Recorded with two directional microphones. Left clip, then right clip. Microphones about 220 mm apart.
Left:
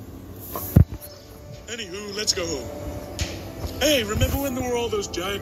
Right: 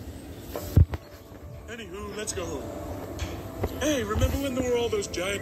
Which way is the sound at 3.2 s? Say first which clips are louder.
Left 1 dB; 25° left (ahead or behind).